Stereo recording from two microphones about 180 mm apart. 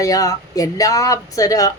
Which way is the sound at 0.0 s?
20° left (ahead or behind).